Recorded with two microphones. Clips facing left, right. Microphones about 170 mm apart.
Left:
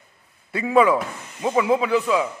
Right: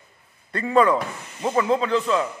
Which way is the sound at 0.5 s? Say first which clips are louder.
Left 1 dB; 5° left (ahead or behind).